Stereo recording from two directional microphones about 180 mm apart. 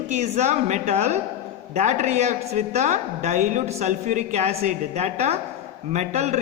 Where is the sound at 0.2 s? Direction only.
40° right (ahead or behind).